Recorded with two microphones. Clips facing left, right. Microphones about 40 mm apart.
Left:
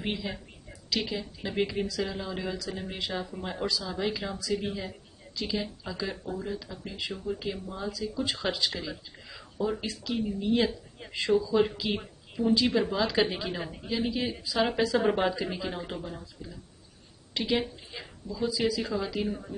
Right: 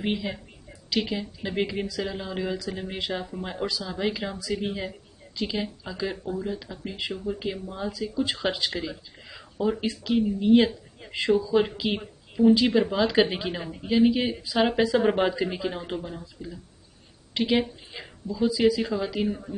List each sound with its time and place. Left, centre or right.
0.0 s speech: centre
3.6 s speech: centre
13.6 s speech: centre
13.8 s speech: right
17.3 s a woman's voice: right; by 19.5 s centre